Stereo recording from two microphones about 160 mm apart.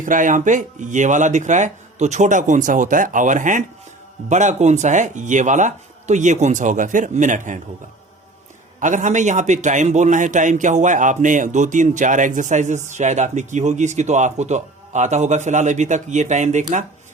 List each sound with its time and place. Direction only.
0.0 s a man's voice: 55° right (ahead or behind)
8.8 s a man's voice: 50° right (ahead or behind)